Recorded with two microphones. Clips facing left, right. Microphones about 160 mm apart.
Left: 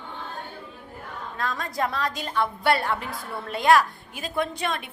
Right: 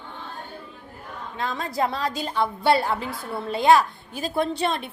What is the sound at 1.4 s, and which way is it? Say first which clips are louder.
A woman's voice: right 2 dB; 25° right (ahead or behind).